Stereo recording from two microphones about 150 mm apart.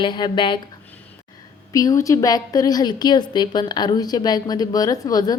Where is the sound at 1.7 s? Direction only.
20° left (ahead or behind).